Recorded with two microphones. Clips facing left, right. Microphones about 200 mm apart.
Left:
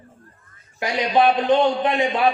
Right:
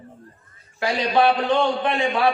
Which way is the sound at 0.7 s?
20° left (ahead or behind).